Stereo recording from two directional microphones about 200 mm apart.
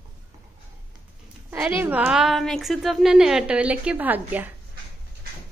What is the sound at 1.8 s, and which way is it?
A woman's voice, 10° right (ahead or behind).